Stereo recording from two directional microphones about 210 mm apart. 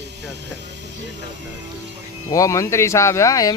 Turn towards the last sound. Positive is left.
turn(degrees=15)  # may be behind; listen again after turning